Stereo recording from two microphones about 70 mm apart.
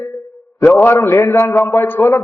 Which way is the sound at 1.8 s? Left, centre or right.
Left.